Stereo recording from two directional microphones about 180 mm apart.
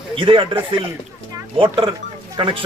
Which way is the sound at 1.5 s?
30° right (ahead or behind).